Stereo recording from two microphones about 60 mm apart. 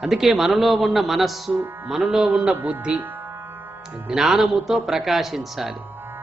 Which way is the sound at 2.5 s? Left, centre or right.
Right.